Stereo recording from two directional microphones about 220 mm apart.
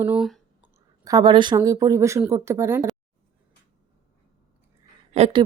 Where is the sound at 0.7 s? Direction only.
15° right (ahead or behind).